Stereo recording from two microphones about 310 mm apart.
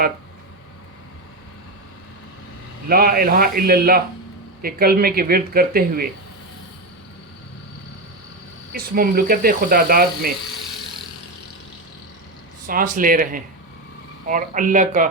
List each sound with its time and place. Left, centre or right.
2.9 s speech: right
8.7 s speech: right
12.6 s speech: right